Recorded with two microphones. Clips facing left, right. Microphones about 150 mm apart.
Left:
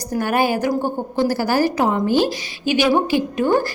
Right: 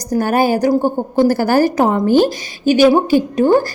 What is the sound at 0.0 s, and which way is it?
A woman's voice, 40° right (ahead or behind).